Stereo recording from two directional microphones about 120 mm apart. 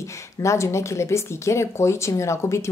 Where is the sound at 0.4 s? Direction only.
25° left (ahead or behind).